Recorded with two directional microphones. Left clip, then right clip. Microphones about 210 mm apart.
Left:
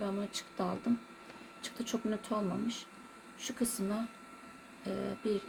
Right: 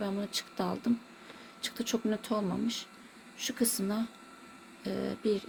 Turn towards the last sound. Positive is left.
turn(degrees=-40)  # may be behind; listen again after turning